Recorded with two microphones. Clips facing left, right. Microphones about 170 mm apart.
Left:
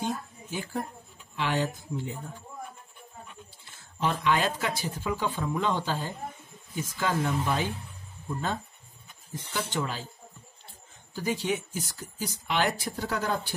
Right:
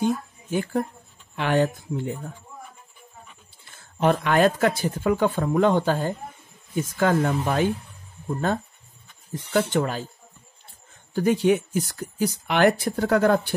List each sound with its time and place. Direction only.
0.5 s speech: 55° right (ahead or behind)
4.0 s speech: 55° right (ahead or behind)
9.5 s speech: 55° right (ahead or behind)
11.1 s speech: 55° right (ahead or behind)